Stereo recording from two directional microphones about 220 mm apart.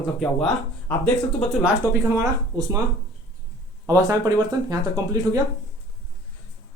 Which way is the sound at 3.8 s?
15° right (ahead or behind).